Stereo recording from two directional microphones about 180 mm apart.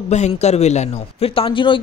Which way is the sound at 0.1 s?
40° left (ahead or behind).